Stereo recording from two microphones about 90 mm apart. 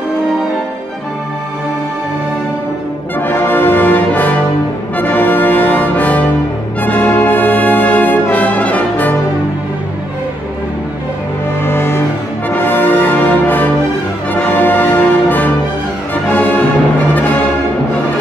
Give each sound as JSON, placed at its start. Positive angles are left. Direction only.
{"t": 3.2, "sound": "brass instrument", "side_deg": 25}
{"t": 11.6, "sound": "music", "side_deg": 30}
{"t": 12.4, "sound": "brass instrument", "side_deg": 25}
{"t": 14.3, "sound": "music", "side_deg": 25}